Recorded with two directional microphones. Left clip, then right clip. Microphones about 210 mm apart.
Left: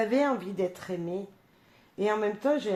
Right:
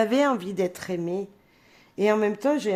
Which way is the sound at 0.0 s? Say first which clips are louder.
Right 4 dB; 35° right (ahead or behind).